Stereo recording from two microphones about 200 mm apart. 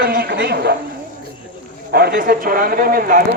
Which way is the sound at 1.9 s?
50° right (ahead or behind).